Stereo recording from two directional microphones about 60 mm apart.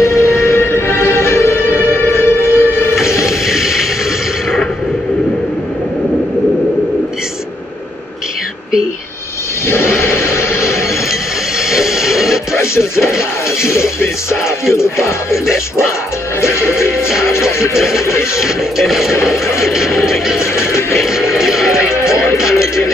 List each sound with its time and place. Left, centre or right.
0.0 s music: left
3.3 s a sound: centre
9.7 s a sound: left
11.7 s music: centre
12.5 s music: left
17.7 s music: centre
19.4 s music: left
19.7 s music: centre
21.4 s music: centre
21.7 s music: left